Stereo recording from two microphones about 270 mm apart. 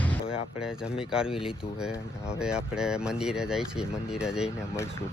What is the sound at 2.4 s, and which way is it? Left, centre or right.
Speech, centre.